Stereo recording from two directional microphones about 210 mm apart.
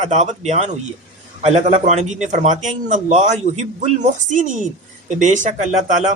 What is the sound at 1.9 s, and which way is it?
A man's voice, 35° right (ahead or behind).